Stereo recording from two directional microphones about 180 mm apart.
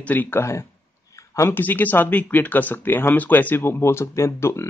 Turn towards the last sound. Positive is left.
turn(degrees=15)  # may be behind; listen again after turning